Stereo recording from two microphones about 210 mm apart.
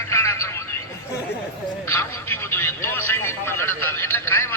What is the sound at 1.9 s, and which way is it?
Speech, 10° left (ahead or behind).